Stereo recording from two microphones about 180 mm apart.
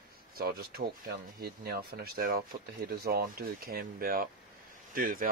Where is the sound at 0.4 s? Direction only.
60° right (ahead or behind).